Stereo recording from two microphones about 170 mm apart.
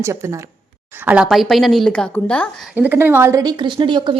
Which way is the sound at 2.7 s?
10° right (ahead or behind).